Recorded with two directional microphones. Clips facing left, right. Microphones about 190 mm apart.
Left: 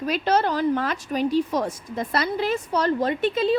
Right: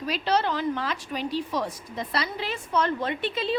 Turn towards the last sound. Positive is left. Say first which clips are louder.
# left 6 dB
turn(degrees=45)  # may be behind; listen again after turning